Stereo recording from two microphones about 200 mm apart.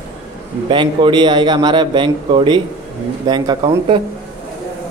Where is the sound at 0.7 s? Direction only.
25° right (ahead or behind).